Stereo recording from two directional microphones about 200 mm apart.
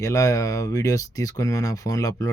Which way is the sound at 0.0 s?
15° left (ahead or behind).